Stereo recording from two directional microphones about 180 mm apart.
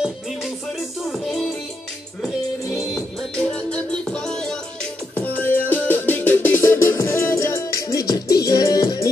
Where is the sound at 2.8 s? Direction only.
Centre (ahead or behind).